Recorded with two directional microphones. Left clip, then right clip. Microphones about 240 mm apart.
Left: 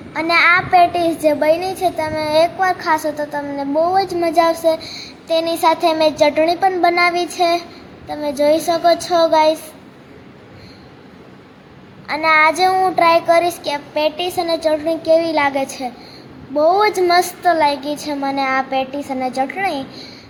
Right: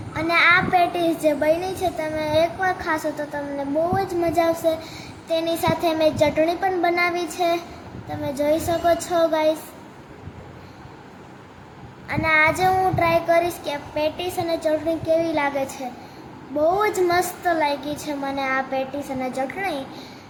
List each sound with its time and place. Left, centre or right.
0.1 s a child's voice: centre
12.0 s a child's voice: centre